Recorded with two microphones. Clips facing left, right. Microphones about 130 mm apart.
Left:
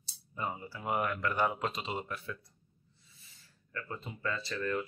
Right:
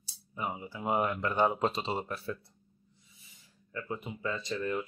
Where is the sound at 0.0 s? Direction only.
10° right (ahead or behind); by 2.3 s 35° right (ahead or behind).